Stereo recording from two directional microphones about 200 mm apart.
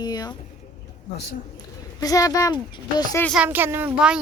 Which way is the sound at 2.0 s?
20° left (ahead or behind).